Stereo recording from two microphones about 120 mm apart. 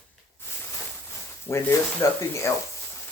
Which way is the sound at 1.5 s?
25° left (ahead or behind).